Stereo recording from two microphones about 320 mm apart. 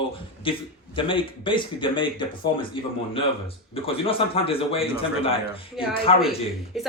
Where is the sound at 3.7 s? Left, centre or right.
Centre.